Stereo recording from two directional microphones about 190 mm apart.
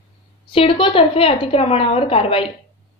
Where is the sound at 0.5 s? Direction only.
30° left (ahead or behind).